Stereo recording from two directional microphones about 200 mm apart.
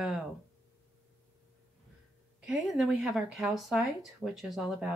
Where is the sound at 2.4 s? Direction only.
5° right (ahead or behind).